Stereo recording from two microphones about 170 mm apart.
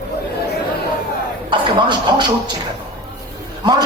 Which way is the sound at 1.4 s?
25° right (ahead or behind).